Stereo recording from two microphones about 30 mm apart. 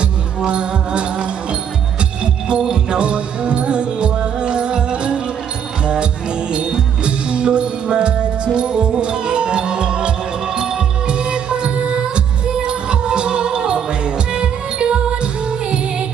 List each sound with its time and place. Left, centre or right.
0.4 s music: right